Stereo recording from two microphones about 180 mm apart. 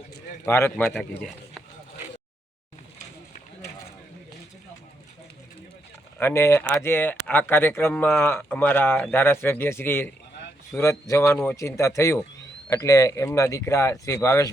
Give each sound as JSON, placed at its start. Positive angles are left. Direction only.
{"t": 0.4, "sound": "speech", "side_deg": 15}
{"t": 6.1, "sound": "speech", "side_deg": 15}